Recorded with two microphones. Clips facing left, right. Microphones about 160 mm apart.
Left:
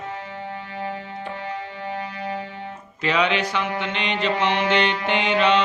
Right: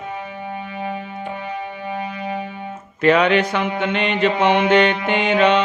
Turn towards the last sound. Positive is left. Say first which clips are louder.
# right 3 dB
turn(degrees=-50)  # may be behind; listen again after turning